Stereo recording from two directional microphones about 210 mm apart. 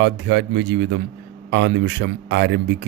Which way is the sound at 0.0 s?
60° right (ahead or behind).